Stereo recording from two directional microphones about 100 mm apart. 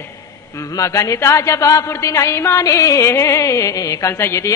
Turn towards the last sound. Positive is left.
turn(degrees=25)  # may be behind; listen again after turning